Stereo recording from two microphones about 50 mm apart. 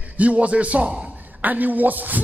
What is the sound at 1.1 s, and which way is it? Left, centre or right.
A woman's voice, right.